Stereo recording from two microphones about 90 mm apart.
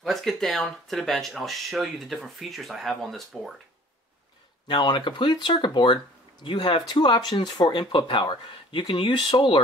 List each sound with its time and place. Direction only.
0.0 s speech: centre (ahead or behind)
4.6 s speech: 60° left (ahead or behind)